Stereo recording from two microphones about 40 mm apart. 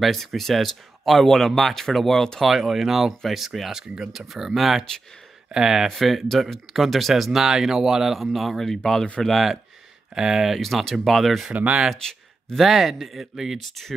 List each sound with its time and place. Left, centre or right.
0.0 s speech: centre
2.4 s speech: centre
5.9 s speech: centre
10.1 s speech: centre
11.5 s speech: right
11.9 s a sound: centre
12.5 s speech: centre
13.6 s speech: centre